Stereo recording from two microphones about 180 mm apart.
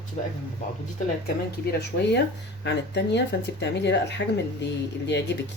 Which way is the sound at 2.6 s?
75° left (ahead or behind).